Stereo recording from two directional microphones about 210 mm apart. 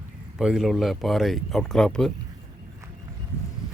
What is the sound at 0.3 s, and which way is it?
Speech, 5° right (ahead or behind).